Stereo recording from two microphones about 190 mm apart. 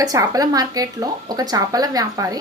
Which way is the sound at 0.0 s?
20° right (ahead or behind).